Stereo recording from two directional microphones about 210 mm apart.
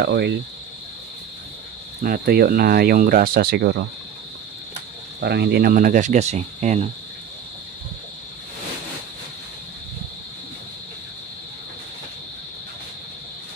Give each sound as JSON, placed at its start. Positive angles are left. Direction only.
{"t": 0.0, "sound": "speech", "side_deg": -55}
{"t": 2.0, "sound": "speech", "side_deg": -45}
{"t": 5.2, "sound": "speech", "side_deg": -50}